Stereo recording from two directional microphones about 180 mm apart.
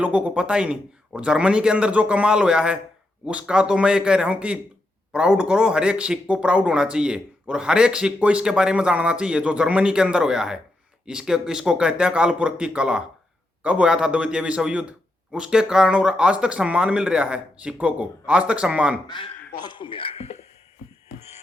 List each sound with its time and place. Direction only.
0.0 s speech: 5° right (ahead or behind)
19.0 s a man's voice: 25° left (ahead or behind)